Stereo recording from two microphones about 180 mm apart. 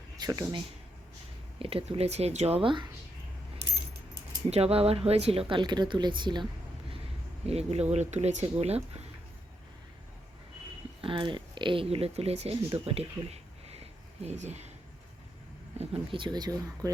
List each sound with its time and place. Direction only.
0.2 s speech: 20° right (ahead or behind)
1.5 s speech: 30° right (ahead or behind)
4.4 s speech: 35° right (ahead or behind)
7.4 s speech: 35° right (ahead or behind)
11.0 s speech: 25° right (ahead or behind)
12.8 s a sound: 35° right (ahead or behind)
15.8 s speech: 30° right (ahead or behind)